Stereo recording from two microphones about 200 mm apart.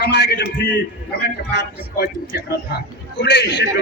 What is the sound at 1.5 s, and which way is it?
A man's voice, 55° left (ahead or behind).